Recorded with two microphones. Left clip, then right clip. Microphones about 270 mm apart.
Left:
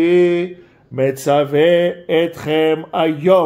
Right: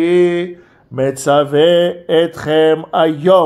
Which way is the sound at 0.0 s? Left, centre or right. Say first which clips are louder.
Right 1 dB; right.